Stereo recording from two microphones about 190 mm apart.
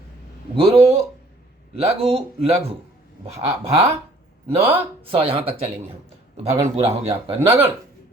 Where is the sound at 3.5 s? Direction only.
35° right (ahead or behind).